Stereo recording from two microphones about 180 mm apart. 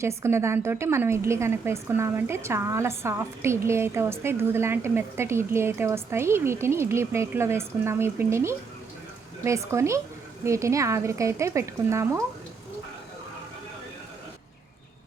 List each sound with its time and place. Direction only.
0.0 s a woman's voice: 15° right (ahead or behind)